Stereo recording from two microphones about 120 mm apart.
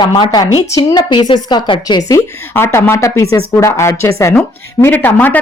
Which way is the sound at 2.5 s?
20° left (ahead or behind).